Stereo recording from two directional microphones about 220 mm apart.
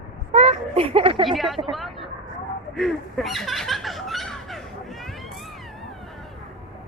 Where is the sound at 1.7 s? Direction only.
Centre (ahead or behind).